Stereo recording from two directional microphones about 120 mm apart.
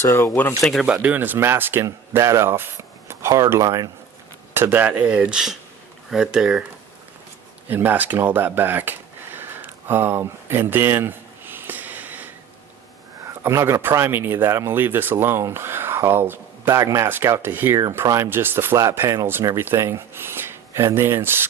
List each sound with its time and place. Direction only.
0.0 s speech: 25° left (ahead or behind)
0.6 s speech: centre (ahead or behind)
0.9 s speech: 15° right (ahead or behind)
4.5 s speech: 15° right (ahead or behind)
7.7 s a sound: 15° right (ahead or behind)
13.4 s speech: 25° right (ahead or behind)
17.7 s speech: 30° right (ahead or behind)